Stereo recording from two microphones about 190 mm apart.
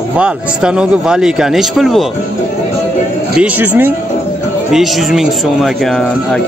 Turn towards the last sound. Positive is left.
turn(degrees=5)  # may be behind; listen again after turning